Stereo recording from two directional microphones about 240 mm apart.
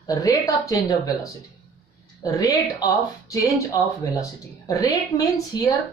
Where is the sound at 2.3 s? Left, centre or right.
Centre.